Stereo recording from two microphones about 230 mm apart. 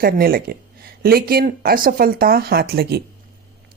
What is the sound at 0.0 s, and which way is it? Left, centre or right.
A woman's voice, right.